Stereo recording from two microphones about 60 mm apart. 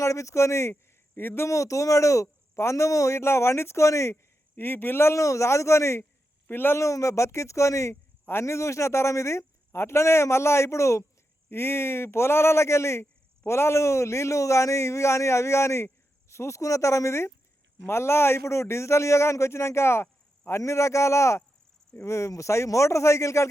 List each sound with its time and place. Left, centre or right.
0.0 s a man's voice: left
1.1 s speech: left
1.5 s a man's voice: left
3.2 s speech: left
4.1 s speech: left
5.1 s a man's voice: left
6.5 s speech: left
6.7 s a man's voice: left
8.2 s speech: left
11.4 s a man's voice: left